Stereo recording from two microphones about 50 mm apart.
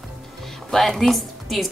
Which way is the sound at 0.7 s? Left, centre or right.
Centre.